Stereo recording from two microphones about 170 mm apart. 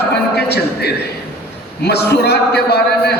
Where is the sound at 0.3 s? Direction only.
75° left (ahead or behind).